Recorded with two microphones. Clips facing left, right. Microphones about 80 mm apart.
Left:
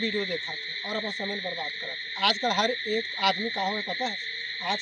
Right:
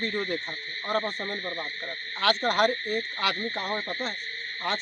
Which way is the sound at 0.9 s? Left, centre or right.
Right.